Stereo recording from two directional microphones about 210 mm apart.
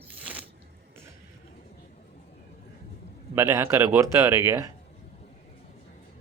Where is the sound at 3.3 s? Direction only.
10° right (ahead or behind).